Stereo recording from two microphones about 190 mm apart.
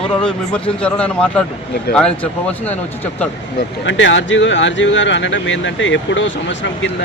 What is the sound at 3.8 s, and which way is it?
Speech, 75° left (ahead or behind).